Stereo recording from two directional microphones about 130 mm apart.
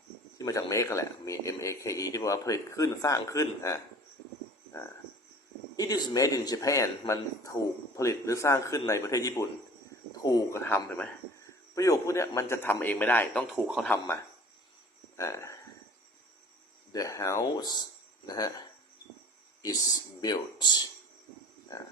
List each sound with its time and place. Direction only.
0.3 s speech: 25° left (ahead or behind)
5.7 s a man's voice: 30° left (ahead or behind)
11.7 s speech: 25° left (ahead or behind)
13.5 s a man's voice: 5° right (ahead or behind)
13.8 s a man's voice: 15° left (ahead or behind)
16.9 s speech: 25° left (ahead or behind)
19.6 s speech: 30° left (ahead or behind)